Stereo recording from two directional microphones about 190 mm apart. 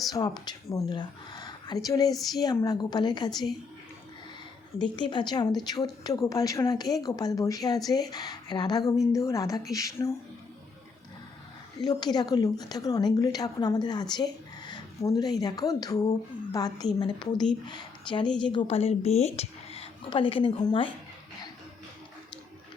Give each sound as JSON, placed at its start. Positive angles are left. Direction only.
{"t": 0.1, "sound": "a woman's voice", "side_deg": 20}
{"t": 4.8, "sound": "a woman's voice", "side_deg": 25}
{"t": 11.9, "sound": "a woman's voice", "side_deg": 20}